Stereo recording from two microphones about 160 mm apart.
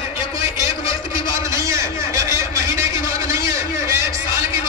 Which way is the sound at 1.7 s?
20° right (ahead or behind).